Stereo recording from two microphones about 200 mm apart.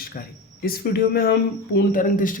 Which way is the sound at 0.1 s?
50° left (ahead or behind).